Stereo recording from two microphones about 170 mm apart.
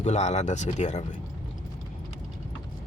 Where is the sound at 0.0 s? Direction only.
40° left (ahead or behind).